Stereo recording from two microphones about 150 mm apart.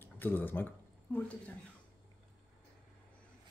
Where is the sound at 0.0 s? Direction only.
10° left (ahead or behind).